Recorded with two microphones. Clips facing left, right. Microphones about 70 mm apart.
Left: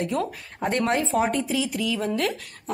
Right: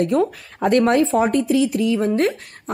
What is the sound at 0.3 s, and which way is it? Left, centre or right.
Speech, right.